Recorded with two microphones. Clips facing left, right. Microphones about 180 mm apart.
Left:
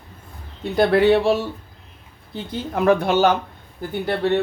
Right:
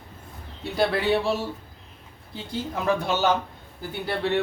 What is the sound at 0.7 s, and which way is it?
Speech, 60° left (ahead or behind).